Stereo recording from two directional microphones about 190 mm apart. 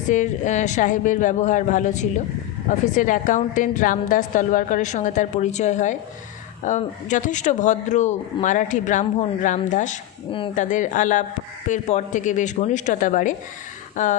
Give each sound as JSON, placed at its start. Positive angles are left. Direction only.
{"t": 0.1, "sound": "a woman's voice", "side_deg": 40}